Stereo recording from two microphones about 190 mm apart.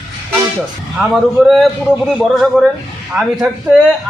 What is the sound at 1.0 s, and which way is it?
Speech, centre (ahead or behind).